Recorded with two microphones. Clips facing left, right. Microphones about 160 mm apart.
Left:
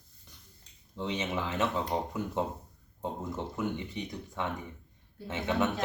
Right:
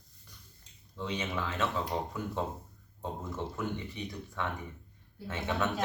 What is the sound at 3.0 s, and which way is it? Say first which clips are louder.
Speech: left 2 dB; 20° left (ahead or behind).